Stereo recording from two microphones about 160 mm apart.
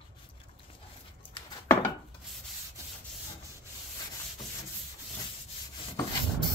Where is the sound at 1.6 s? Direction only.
15° left (ahead or behind).